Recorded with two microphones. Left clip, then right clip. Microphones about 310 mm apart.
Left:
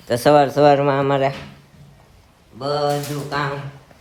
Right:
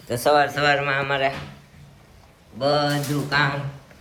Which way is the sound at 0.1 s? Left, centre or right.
Left.